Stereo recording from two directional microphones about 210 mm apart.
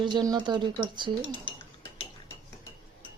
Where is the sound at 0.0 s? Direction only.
20° right (ahead or behind).